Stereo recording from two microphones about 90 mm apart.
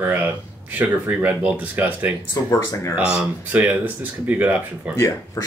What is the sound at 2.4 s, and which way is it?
Speech, 30° left (ahead or behind).